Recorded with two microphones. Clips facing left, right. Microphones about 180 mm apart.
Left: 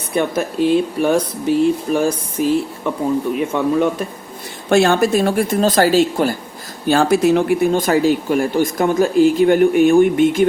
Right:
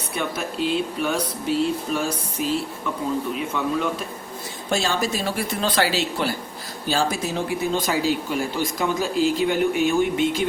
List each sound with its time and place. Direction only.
0.2 s speech: 55° left (ahead or behind)
6.8 s speech: 60° left (ahead or behind)